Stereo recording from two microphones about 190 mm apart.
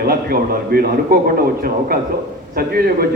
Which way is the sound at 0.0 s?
55° right (ahead or behind).